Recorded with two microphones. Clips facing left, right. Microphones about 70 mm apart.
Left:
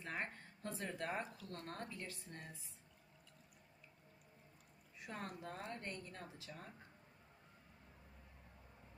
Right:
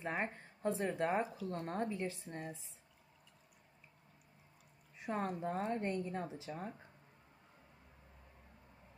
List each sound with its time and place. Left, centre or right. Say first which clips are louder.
0.0 s a woman's voice: right 6 dB; right
4.9 s a woman's voice: right 10 dB; right